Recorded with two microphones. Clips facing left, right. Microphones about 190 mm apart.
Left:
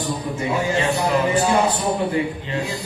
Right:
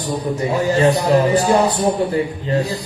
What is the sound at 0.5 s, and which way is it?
Speech, 35° right (ahead or behind).